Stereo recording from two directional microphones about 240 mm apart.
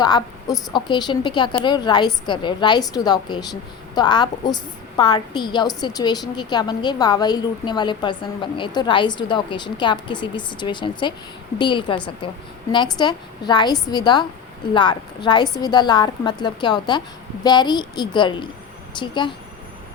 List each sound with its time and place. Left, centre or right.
0.0 s a woman's voice: centre